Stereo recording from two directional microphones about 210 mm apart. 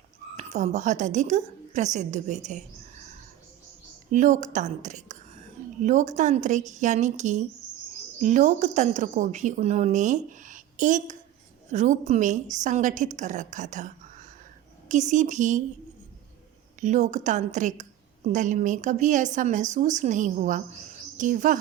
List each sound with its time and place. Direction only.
0.3 s speech: 35° right (ahead or behind)
4.1 s speech: 35° right (ahead or behind)
16.8 s speech: 35° right (ahead or behind)